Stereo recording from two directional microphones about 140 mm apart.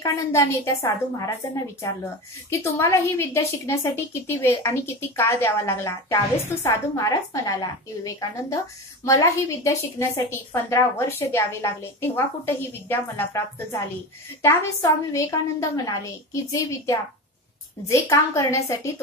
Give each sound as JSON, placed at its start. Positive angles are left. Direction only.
{"t": 0.0, "sound": "a woman's voice", "side_deg": 20}
{"t": 2.5, "sound": "a woman's voice", "side_deg": 20}
{"t": 17.8, "sound": "a woman's voice", "side_deg": 25}